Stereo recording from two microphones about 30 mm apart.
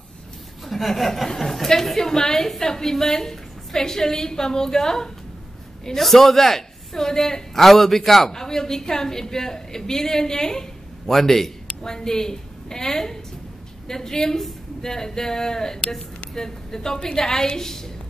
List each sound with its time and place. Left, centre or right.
0.7 s a woman's voice: centre
8.3 s a woman's voice: centre